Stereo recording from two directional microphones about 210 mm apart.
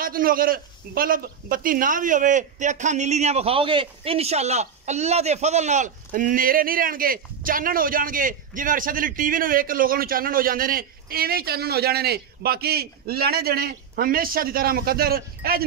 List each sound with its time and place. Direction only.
0.0 s a man's voice: 45° right (ahead or behind)